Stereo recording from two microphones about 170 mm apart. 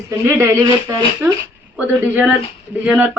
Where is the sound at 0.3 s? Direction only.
20° right (ahead or behind).